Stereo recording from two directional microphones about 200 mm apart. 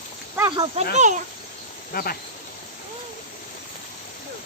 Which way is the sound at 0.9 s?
35° right (ahead or behind).